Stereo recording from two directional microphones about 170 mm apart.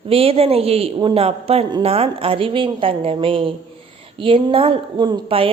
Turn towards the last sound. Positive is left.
turn(degrees=-30)  # may be behind; listen again after turning